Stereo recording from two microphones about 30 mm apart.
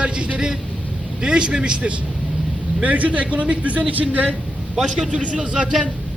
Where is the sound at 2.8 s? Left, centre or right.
Right.